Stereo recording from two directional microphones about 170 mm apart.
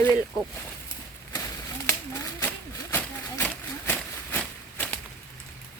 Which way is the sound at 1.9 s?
15° left (ahead or behind).